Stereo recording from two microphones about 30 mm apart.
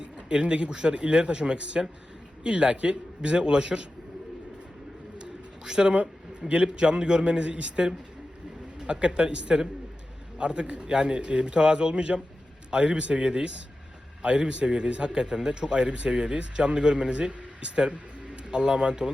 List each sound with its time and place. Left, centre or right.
0.0 s a sound: right
0.7 s a man's voice: right
5.1 s bird: right
6.5 s a man's voice: right
8.9 s a man's voice: right
18.5 s a man's voice: right